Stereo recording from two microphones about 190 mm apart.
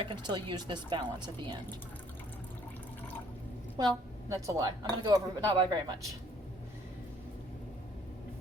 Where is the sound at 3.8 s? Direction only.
20° right (ahead or behind).